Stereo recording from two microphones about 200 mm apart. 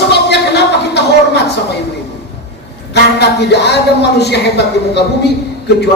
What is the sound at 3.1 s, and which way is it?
A man's voice, 55° left (ahead or behind).